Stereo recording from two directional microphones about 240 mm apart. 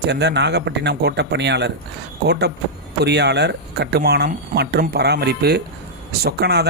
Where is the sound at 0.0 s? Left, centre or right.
Right.